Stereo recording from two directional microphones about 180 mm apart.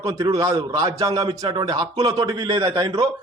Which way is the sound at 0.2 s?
20° right (ahead or behind).